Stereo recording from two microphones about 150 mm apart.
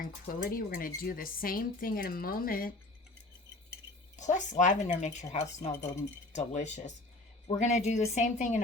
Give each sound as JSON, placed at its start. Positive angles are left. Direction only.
{"t": 0.0, "sound": "speech", "side_deg": 70}
{"t": 4.2, "sound": "a woman's voice", "side_deg": 55}